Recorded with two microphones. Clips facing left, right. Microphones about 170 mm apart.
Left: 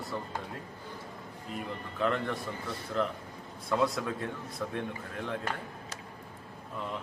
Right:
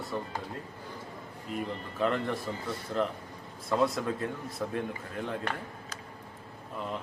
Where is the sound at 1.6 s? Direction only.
Centre (ahead or behind).